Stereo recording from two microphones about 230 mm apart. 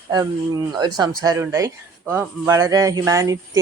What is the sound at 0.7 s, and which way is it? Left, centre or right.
Speech, centre.